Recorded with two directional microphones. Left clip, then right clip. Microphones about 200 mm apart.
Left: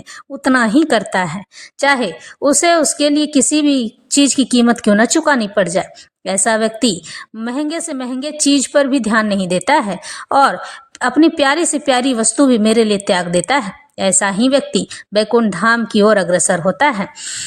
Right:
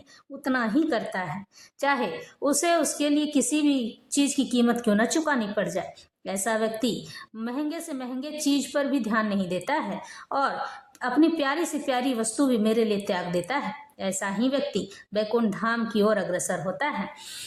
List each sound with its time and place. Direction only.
0.4 s a woman's voice: 35° left (ahead or behind)